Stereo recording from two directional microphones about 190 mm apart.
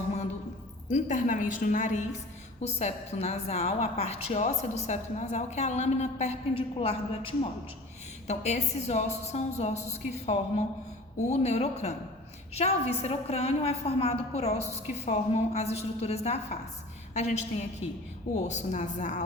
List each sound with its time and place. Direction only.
0.9 s a woman's voice: 40° left (ahead or behind)